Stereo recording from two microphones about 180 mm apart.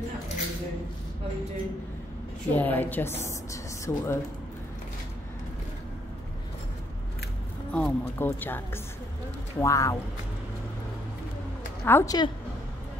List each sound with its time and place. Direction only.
2.5 s speech: 10° left (ahead or behind)
7.7 s speech: 10° left (ahead or behind)
11.8 s speech: 15° left (ahead or behind)